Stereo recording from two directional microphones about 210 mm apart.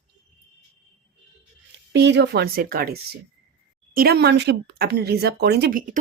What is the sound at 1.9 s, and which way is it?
Speech, 55° right (ahead or behind).